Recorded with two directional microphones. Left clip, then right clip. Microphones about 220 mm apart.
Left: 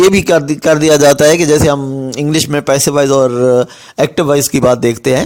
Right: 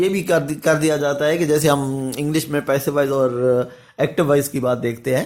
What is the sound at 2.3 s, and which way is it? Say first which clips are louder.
Speech: left 8 dB; 45° left (ahead or behind).